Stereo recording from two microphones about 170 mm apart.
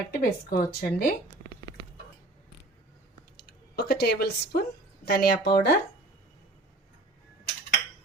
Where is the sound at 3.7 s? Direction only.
70° left (ahead or behind).